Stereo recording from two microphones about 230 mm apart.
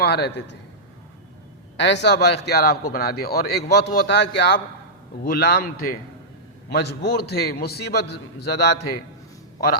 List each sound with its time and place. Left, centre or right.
0.0 s a man's voice: left
1.8 s a man's voice: left